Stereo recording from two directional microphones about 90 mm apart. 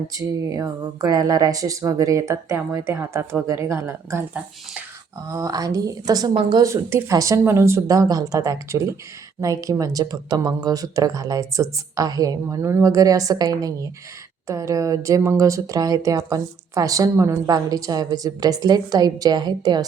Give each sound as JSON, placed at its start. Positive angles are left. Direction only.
{"t": 0.1, "sound": "speech", "side_deg": -40}
{"t": 5.3, "sound": "speech", "side_deg": -40}
{"t": 17.5, "sound": "speech", "side_deg": -45}